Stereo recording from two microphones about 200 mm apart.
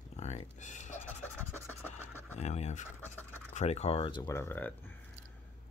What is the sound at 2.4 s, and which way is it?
Speech, 35° left (ahead or behind).